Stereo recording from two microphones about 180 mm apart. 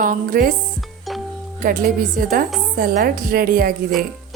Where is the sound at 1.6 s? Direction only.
50° right (ahead or behind).